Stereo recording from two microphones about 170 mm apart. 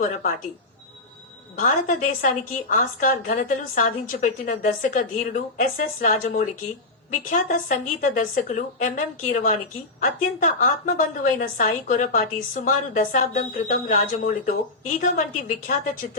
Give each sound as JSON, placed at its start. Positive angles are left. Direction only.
{"t": 0.0, "sound": "a woman's voice", "side_deg": 55}
{"t": 1.5, "sound": "a woman's voice", "side_deg": 50}